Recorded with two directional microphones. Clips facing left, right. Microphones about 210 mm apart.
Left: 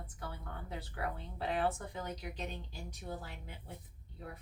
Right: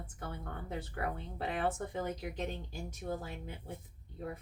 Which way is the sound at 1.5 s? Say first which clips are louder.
Even; 50° right (ahead or behind).